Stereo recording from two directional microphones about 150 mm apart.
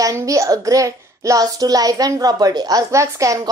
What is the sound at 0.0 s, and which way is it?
A child's voice, 20° right (ahead or behind).